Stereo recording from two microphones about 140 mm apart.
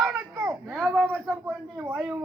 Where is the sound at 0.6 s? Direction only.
Centre (ahead or behind).